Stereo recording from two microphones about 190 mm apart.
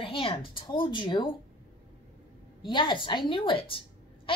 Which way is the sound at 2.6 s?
25° left (ahead or behind).